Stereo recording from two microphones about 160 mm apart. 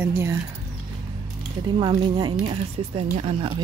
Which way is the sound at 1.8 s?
30° right (ahead or behind).